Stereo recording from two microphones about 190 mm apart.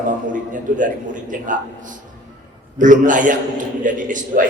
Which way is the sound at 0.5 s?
45° right (ahead or behind).